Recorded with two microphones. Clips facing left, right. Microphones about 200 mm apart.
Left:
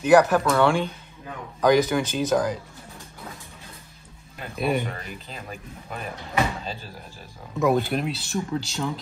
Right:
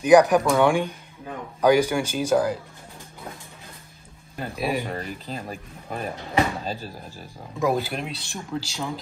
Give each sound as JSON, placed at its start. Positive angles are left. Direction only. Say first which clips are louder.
{"t": 0.0, "sound": "speech", "louder": "right 2 dB", "side_deg": -15}
{"t": 4.6, "sound": "speech", "louder": "left 2 dB", "side_deg": 0}
{"t": 4.9, "sound": "speech", "louder": "right 6 dB", "side_deg": -35}
{"t": 7.5, "sound": "speech", "louder": "left 2 dB", "side_deg": 0}